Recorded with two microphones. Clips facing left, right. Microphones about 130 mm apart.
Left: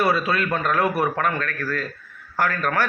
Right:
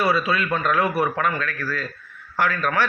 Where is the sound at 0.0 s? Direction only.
45° left (ahead or behind).